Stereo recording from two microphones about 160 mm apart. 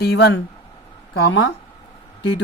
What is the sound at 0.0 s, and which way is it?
Speech, 90° left.